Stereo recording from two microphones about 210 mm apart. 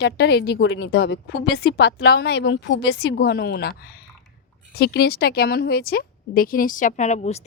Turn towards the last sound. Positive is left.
turn(degrees=35)  # may be behind; listen again after turning